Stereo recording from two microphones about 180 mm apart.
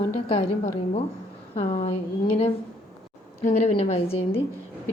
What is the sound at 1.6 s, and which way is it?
Speech, 45° left (ahead or behind).